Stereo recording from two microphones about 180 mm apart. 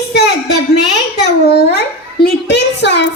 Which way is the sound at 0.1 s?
65° left (ahead or behind).